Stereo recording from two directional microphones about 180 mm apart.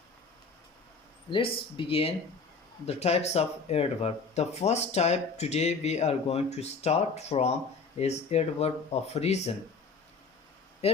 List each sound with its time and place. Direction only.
1.3 s speech: 30° left (ahead or behind)
10.8 s speech: 35° left (ahead or behind)